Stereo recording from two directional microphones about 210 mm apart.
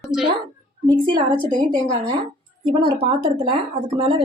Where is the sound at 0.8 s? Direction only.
20° right (ahead or behind).